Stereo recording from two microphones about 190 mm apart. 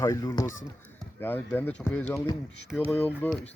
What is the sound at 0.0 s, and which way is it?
Speech, 15° left (ahead or behind).